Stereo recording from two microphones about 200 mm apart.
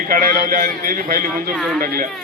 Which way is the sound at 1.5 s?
Centre (ahead or behind).